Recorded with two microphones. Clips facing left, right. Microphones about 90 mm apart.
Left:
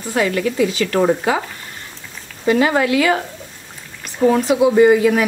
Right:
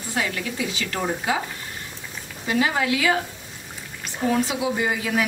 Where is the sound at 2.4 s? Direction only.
55° left (ahead or behind).